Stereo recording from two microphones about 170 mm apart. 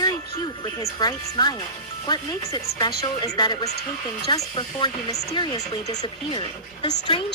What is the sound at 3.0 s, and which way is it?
Speech, 25° left (ahead or behind).